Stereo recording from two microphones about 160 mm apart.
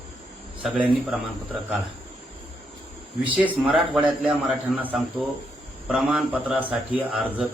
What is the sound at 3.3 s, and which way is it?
Speech, 10° right (ahead or behind).